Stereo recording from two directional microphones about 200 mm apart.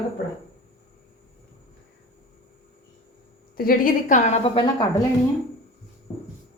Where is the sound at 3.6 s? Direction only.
45° left (ahead or behind); by 4.8 s 25° left (ahead or behind).